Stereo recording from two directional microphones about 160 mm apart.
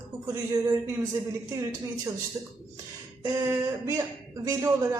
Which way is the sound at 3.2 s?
20° right (ahead or behind).